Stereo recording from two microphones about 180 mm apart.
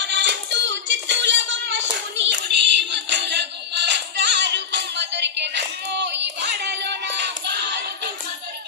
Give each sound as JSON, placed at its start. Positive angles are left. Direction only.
{"t": 0.0, "sound": "child singing", "side_deg": -80}